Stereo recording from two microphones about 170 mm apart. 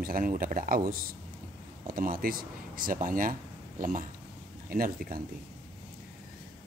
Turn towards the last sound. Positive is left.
turn(degrees=-55)  # may be behind; listen again after turning